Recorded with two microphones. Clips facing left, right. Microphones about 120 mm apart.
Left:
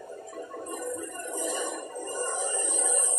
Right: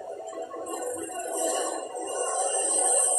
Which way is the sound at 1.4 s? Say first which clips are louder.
Right 4 dB; 25° right (ahead or behind).